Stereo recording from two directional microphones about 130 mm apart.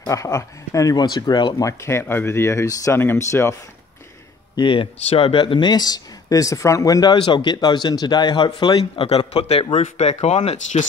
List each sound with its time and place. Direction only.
0.0 s speech: 25° left (ahead or behind)
4.6 s speech: 40° left (ahead or behind); by 10.8 s 55° left (ahead or behind)